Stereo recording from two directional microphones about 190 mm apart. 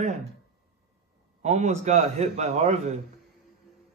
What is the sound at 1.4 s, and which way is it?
A man's voice, 35° right (ahead or behind).